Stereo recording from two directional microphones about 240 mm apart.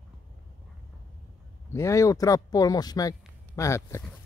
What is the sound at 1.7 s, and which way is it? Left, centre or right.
Speech, centre.